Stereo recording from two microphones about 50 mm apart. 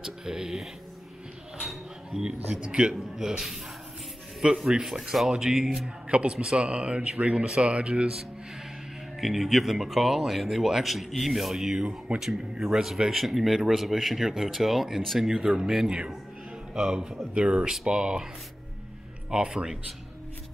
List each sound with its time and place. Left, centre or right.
0.0 s speech: centre
2.0 s speech: centre
6.3 s speech: centre
6.6 s speech: right
9.2 s speech: centre
19.3 s speech: centre